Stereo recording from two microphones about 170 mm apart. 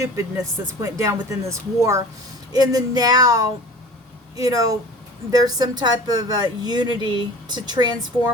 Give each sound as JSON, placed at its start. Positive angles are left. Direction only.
{"t": 0.8, "sound": "a woman's voice", "side_deg": -20}